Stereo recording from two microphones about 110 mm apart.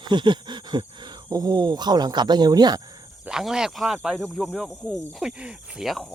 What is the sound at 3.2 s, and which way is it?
Speech, 5° right (ahead or behind).